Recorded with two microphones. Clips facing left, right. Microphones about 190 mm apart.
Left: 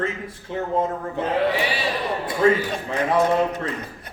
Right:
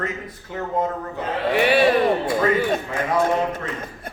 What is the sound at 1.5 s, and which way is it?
Speech, 60° right (ahead or behind).